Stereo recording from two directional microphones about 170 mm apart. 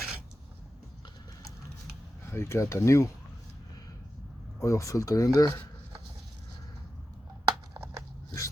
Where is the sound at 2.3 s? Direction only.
15° left (ahead or behind).